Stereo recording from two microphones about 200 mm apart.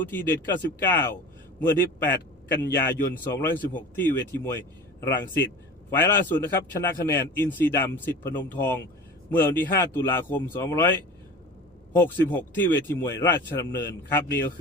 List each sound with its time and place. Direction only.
0.0 s a man's voice: 10° left (ahead or behind)
11.9 s a man's voice: 10° left (ahead or behind)